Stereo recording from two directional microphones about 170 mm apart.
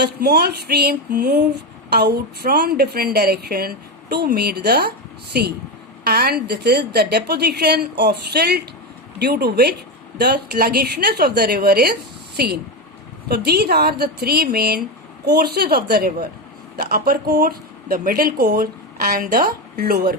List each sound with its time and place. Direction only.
0.0 s speech: 70° right (ahead or behind)